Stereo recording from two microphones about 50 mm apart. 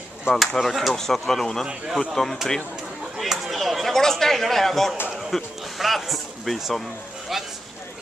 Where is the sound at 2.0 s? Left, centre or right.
Centre.